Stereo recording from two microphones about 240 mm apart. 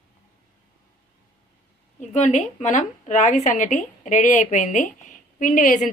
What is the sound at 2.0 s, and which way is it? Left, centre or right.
A woman's voice, left.